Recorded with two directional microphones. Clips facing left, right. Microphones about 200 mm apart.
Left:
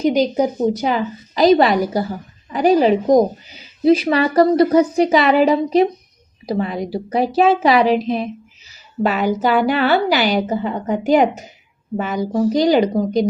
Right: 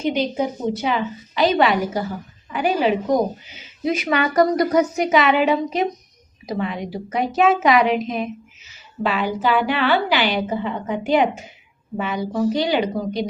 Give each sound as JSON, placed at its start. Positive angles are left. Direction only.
{"t": 0.0, "sound": "speech", "side_deg": 40}
{"t": 9.0, "sound": "speech", "side_deg": 45}